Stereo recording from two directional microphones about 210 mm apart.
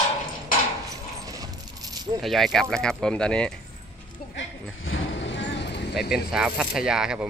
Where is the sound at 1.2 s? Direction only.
15° right (ahead or behind).